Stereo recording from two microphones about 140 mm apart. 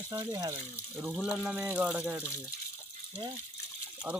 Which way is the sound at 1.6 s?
10° right (ahead or behind).